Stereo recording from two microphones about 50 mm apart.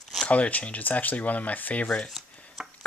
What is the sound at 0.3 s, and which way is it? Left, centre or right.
Speech, left.